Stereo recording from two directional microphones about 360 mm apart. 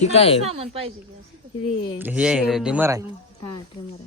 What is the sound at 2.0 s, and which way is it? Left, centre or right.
Speech, centre.